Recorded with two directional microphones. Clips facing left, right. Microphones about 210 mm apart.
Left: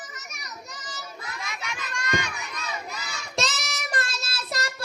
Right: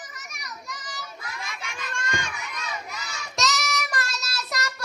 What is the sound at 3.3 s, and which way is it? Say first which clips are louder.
Child singing: right 3 dB; 30° left (ahead or behind).